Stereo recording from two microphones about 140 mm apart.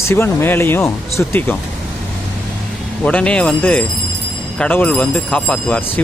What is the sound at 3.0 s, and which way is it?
Speech, 5° left (ahead or behind).